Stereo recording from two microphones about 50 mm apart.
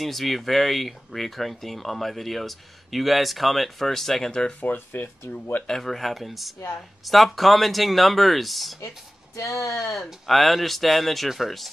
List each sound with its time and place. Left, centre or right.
0.0 s speech: centre
4.3 s speech: centre
4.6 s speech: left
5.7 s speech: centre
8.8 s speech: left
9.9 s speech: centre